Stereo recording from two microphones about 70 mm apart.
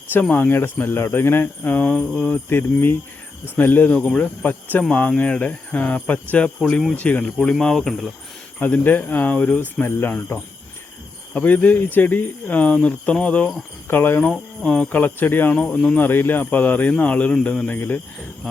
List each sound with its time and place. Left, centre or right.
0.1 s speech: left
3.9 s speech: centre
7.3 s speech: centre
8.5 s speech: left
9.8 s speech: left
13.8 s speech: left
14.3 s speech: centre
15.0 s speech: left
15.5 s speech: centre
16.0 s speech: left
17.7 s speech: left